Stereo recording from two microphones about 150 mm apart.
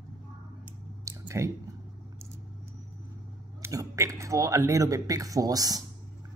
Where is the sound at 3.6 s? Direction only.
20° right (ahead or behind).